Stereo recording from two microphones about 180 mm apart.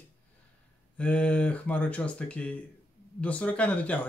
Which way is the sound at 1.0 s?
5° left (ahead or behind).